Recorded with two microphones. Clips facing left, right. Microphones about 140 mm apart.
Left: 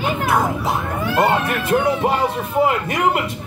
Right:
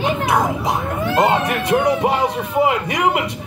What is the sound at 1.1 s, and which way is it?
Speech, 15° right (ahead or behind).